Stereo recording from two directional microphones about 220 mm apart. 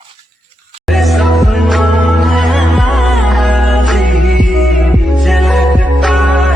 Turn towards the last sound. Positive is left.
turn(degrees=0)  # may be behind; listen again after turning